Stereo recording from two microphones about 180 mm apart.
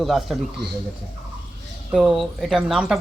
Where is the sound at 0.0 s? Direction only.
Centre (ahead or behind).